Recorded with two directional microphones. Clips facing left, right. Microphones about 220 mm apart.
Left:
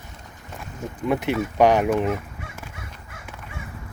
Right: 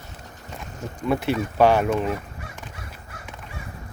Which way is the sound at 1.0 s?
20° left (ahead or behind).